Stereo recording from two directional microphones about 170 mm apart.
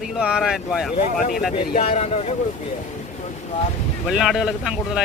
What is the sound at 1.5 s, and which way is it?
Speech, 40° left (ahead or behind).